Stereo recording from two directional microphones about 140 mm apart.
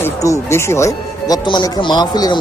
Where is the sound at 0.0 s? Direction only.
20° left (ahead or behind).